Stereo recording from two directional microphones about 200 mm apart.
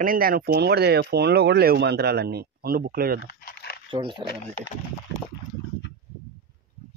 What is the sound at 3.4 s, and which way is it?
Crumpling, 50° left (ahead or behind).